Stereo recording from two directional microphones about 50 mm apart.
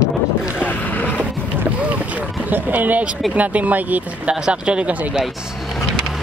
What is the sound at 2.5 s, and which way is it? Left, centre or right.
Speech, right.